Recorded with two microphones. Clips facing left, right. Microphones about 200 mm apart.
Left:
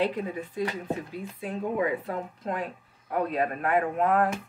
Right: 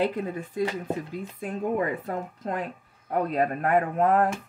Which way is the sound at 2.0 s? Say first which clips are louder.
Right 1 dB; 45° right (ahead or behind).